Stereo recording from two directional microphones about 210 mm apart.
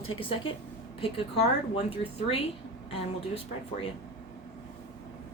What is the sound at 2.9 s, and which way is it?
Speech, 25° left (ahead or behind).